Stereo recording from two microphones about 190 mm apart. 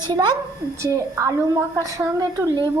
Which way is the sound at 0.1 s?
25° right (ahead or behind).